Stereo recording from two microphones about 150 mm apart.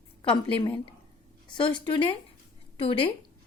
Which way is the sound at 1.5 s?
35° left (ahead or behind).